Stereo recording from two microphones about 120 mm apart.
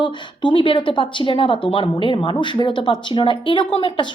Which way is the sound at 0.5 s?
45° left (ahead or behind).